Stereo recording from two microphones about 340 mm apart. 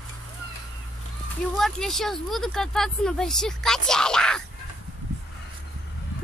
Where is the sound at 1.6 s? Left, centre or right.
Centre.